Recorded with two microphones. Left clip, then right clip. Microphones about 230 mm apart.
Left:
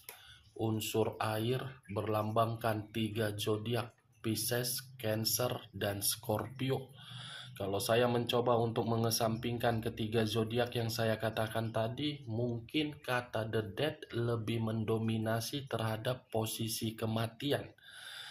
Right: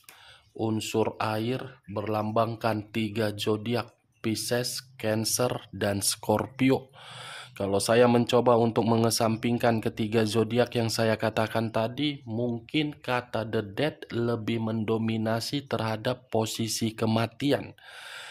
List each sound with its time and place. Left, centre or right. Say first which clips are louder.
0.6 s speech: right 7 dB; right